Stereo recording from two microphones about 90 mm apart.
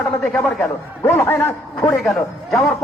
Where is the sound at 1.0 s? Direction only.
25° left (ahead or behind).